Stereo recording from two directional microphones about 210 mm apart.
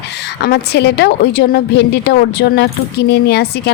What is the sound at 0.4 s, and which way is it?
Speech, 50° left (ahead or behind).